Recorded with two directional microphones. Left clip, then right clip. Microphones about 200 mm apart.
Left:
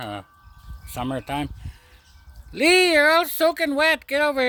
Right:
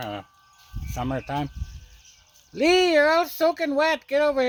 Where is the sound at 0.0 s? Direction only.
25° left (ahead or behind).